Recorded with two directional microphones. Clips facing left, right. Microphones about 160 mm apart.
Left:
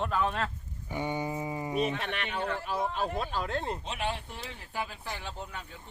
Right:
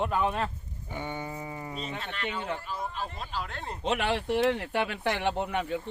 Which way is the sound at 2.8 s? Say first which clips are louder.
Left 5 dB; 85° left.